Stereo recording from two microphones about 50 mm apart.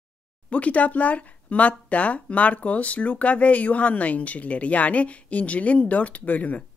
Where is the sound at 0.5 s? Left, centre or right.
Left.